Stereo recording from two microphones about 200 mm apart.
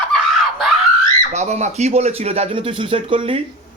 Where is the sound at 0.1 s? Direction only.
Centre (ahead or behind).